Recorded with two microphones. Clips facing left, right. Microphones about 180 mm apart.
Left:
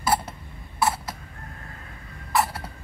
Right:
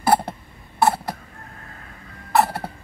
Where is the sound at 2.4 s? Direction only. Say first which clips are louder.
Right 5 dB; 65° right (ahead or behind).